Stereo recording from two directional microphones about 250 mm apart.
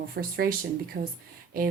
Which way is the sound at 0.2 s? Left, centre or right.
Right.